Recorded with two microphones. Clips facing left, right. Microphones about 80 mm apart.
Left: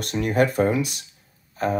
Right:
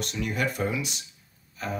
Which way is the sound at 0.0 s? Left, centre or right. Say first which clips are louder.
Left 8 dB; left.